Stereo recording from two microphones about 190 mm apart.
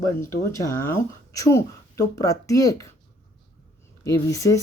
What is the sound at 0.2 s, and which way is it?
Speech, 15° left (ahead or behind).